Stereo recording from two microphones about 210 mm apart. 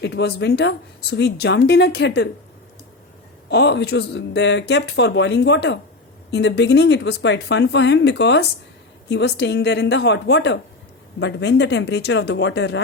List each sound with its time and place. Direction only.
0.0 s a woman's voice: 55° left (ahead or behind)
3.5 s a woman's voice: 55° left (ahead or behind)